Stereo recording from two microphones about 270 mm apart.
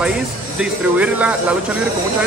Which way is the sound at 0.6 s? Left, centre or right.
Centre.